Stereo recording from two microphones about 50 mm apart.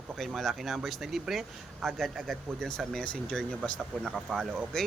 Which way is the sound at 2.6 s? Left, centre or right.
Centre.